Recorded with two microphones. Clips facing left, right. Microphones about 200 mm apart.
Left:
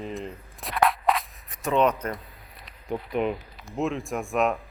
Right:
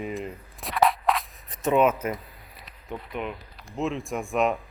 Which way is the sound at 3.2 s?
35° left (ahead or behind).